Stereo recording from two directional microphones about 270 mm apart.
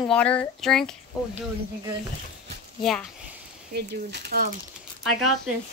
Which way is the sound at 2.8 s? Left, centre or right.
Centre.